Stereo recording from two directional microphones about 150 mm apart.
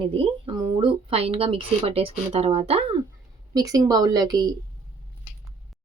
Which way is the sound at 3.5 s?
25° right (ahead or behind).